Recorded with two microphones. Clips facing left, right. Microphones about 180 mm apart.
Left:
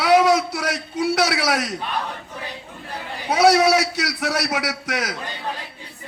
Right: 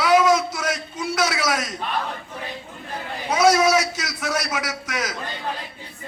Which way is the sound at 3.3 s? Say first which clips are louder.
Left 2 dB; 65° left (ahead or behind).